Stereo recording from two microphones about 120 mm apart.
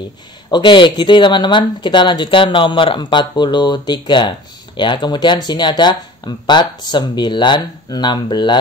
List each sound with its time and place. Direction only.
0.5 s speech: 40° left (ahead or behind)